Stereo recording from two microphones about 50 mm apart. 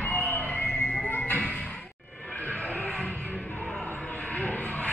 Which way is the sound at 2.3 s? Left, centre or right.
Left.